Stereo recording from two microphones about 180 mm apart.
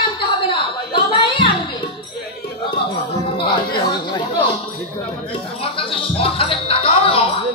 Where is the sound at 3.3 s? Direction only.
30° left (ahead or behind).